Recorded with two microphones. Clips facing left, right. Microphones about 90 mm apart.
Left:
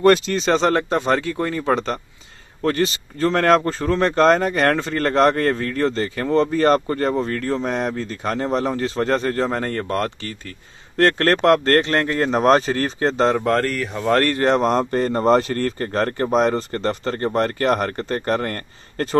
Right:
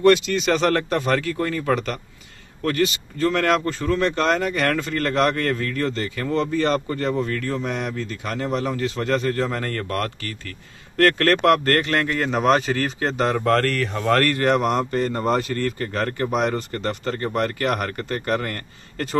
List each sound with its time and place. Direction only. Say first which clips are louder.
0.0 s speech: left 1 dB; 40° left (ahead or behind); by 14.1 s 10° left (ahead or behind)
14.1 s speech: left 2 dB; 25° left (ahead or behind)